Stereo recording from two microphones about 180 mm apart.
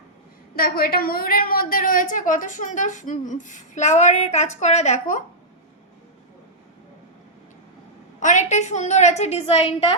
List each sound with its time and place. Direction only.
0.5 s a woman's voice: 55° left (ahead or behind); by 5.2 s 40° left (ahead or behind)
8.2 s a woman's voice: 40° left (ahead or behind)